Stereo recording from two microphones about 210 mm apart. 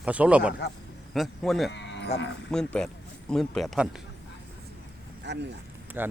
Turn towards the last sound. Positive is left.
turn(degrees=-10)  # may be behind; listen again after turning